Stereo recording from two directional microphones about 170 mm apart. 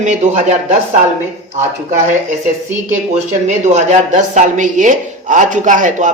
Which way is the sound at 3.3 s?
45° right (ahead or behind).